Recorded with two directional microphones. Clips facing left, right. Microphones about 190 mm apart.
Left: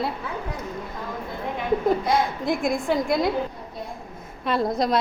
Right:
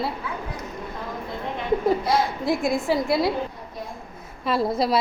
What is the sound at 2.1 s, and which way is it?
A woman's voice, centre (ahead or behind).